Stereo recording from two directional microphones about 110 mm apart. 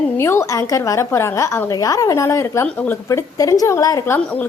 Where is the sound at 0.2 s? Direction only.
25° left (ahead or behind).